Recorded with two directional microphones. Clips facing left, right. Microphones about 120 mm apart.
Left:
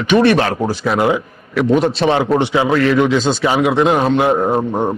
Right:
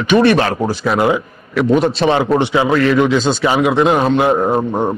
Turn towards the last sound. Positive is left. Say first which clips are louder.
# right 1 dB
turn(degrees=-35)  # may be behind; listen again after turning